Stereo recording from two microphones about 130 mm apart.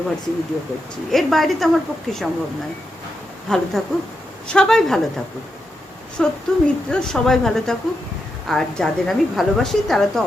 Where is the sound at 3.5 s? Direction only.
5° left (ahead or behind).